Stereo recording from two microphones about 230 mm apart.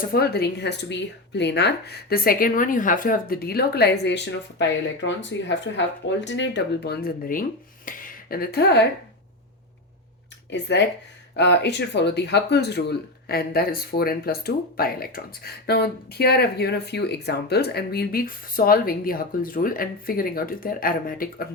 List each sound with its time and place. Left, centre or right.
0.1 s a woman's voice: left
10.5 s a woman's voice: left